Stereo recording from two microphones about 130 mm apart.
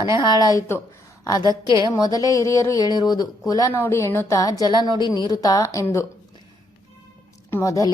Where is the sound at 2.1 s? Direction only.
25° left (ahead or behind).